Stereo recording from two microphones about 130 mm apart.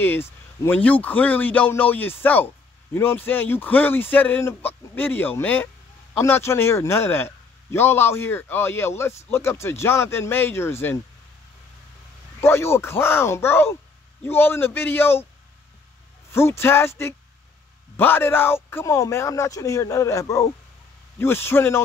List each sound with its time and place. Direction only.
0.0 s a man's voice: 15° left (ahead or behind)
12.4 s a man's voice: 20° left (ahead or behind)
16.3 s a man's voice: 20° left (ahead or behind)